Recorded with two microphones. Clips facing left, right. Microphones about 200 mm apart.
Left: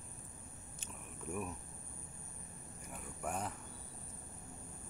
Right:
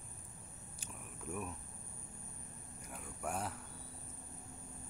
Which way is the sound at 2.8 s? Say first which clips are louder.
Even; 5° left (ahead or behind).